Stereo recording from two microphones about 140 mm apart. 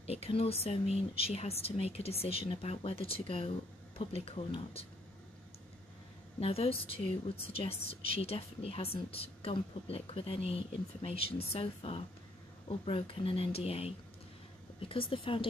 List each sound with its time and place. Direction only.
0.0 s speech: 45° left (ahead or behind)
6.4 s speech: 45° left (ahead or behind)